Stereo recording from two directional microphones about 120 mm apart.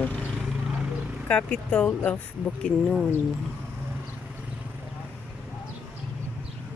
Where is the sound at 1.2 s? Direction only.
10° left (ahead or behind).